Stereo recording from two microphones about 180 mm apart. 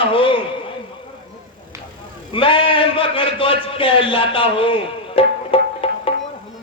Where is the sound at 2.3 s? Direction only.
30° left (ahead or behind).